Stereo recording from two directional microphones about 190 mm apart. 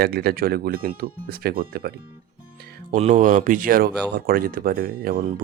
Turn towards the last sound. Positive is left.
turn(degrees=-45)  # may be behind; listen again after turning